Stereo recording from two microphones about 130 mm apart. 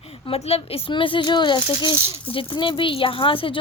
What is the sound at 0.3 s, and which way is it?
Speech, 50° left (ahead or behind).